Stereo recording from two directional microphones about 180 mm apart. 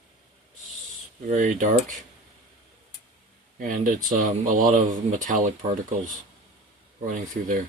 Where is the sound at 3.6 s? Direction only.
50° right (ahead or behind).